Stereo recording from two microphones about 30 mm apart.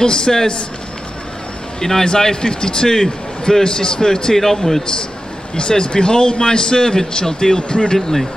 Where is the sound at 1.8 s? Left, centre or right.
Centre.